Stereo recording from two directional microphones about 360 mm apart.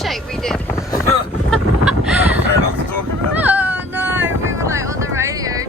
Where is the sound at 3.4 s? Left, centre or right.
Centre.